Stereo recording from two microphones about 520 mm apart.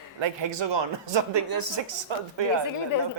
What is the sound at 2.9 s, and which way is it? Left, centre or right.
Speech, left.